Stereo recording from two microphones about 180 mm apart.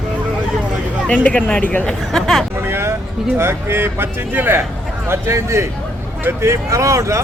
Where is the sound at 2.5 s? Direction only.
15° right (ahead or behind).